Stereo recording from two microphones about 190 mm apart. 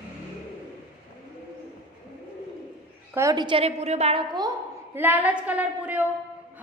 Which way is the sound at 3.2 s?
20° right (ahead or behind).